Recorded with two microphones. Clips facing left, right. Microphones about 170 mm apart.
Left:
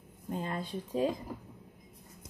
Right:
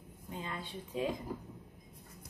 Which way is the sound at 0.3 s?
50° left (ahead or behind).